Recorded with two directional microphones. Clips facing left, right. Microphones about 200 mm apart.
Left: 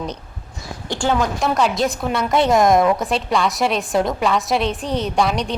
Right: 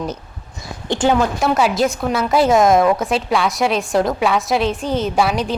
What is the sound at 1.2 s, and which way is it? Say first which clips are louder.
A woman's voice: right 2 dB; 5° right (ahead or behind).